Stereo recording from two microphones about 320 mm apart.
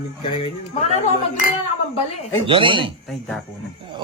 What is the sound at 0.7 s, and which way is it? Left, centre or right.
Speech, left.